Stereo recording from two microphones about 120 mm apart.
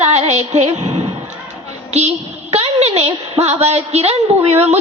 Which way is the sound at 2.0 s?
65° right (ahead or behind).